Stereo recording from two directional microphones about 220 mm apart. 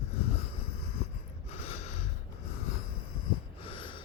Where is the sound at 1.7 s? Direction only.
30° left (ahead or behind).